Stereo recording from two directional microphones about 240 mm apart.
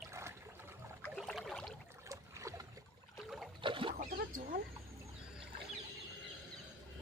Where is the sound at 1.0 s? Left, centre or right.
Centre.